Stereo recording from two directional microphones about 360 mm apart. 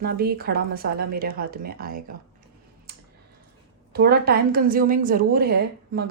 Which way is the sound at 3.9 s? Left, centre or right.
Right.